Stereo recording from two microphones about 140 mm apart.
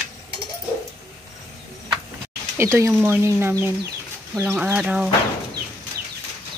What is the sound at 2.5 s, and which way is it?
Speech, 20° right (ahead or behind).